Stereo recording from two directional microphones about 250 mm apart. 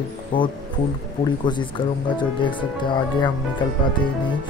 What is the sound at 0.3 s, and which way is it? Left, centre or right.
Speech, centre.